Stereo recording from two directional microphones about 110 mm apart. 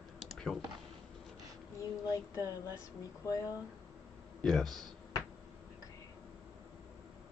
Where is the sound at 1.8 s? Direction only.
30° left (ahead or behind).